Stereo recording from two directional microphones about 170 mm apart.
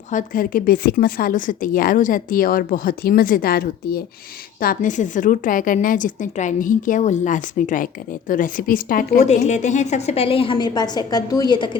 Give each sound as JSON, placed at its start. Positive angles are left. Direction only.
{"t": 0.1, "sound": "a woman's voice", "side_deg": 50}
{"t": 9.2, "sound": "a woman's voice", "side_deg": 45}